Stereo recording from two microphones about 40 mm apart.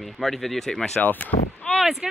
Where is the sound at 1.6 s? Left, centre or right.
Left.